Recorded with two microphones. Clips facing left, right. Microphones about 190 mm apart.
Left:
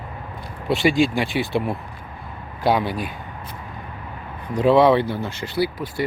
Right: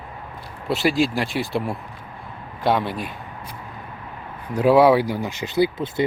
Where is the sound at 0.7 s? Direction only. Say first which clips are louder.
Left 2 dB; centre (ahead or behind).